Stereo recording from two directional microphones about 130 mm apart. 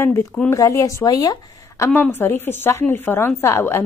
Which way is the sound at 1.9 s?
15° left (ahead or behind).